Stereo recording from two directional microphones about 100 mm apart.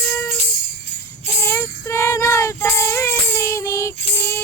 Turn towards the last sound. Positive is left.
turn(degrees=25)  # may be behind; listen again after turning